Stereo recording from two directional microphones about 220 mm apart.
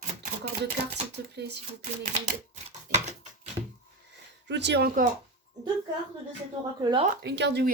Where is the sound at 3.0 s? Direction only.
30° right (ahead or behind).